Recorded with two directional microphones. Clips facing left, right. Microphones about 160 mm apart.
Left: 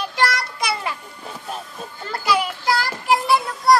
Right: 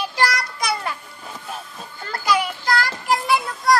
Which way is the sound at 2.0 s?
5° left (ahead or behind).